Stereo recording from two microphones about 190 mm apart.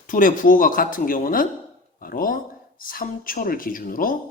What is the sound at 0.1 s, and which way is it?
A man's voice, 45° left (ahead or behind).